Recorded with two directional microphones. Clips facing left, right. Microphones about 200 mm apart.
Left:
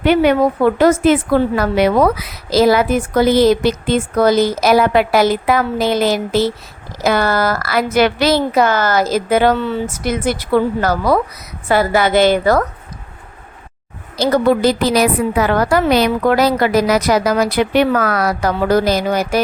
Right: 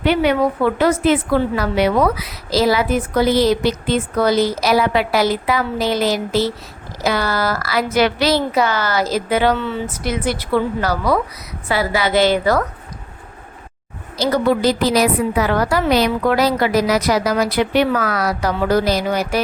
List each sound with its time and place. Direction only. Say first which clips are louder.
0.0 s a woman's voice: left 4 dB; 50° left (ahead or behind)
14.2 s a woman's voice: left 3 dB; 50° left (ahead or behind)